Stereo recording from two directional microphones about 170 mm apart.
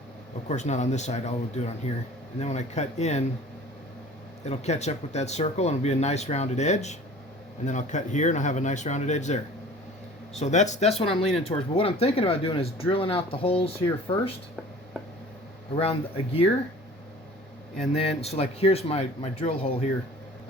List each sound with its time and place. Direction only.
0.4 s speech: 45° left (ahead or behind)
4.4 s speech: 40° left (ahead or behind)
11.2 s speech: centre (ahead or behind)
11.4 s speech: 35° left (ahead or behind)
15.7 s speech: 35° left (ahead or behind)
17.9 s speech: 35° left (ahead or behind)